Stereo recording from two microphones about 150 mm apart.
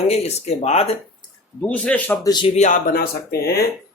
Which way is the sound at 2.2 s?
30° left (ahead or behind).